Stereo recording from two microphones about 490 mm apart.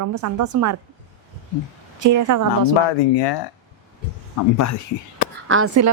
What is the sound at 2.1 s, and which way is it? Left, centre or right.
Speech, right.